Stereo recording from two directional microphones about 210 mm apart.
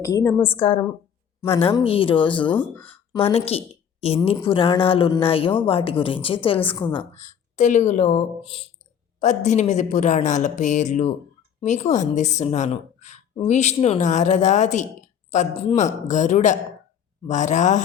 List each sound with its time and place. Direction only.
0.0 s a woman's voice: 15° left (ahead or behind)
0.5 s speech: 30° left (ahead or behind)
1.4 s a woman's voice: 10° left (ahead or behind)
1.6 s speech: 25° left (ahead or behind)
2.6 s a woman's voice: 10° left (ahead or behind)
3.1 s speech: 25° left (ahead or behind)
7.2 s a woman's voice: 35° left (ahead or behind)
9.2 s speech: 35° left (ahead or behind)